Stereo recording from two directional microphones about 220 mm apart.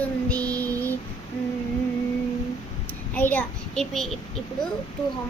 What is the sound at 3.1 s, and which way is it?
Speech, 5° left (ahead or behind).